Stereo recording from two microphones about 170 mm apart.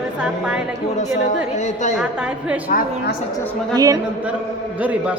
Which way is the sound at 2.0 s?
5° right (ahead or behind).